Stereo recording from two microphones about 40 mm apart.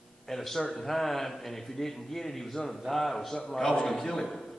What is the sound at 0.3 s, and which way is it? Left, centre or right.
A man's voice, centre.